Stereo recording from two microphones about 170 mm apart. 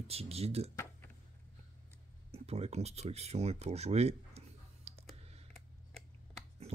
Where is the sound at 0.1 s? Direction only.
35° right (ahead or behind).